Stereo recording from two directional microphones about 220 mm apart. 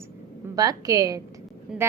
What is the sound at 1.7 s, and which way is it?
Speech, 5° right (ahead or behind).